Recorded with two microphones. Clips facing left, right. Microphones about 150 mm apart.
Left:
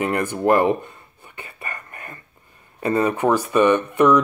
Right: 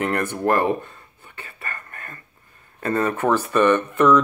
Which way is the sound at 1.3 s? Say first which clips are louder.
Left 1 dB; 15° left (ahead or behind).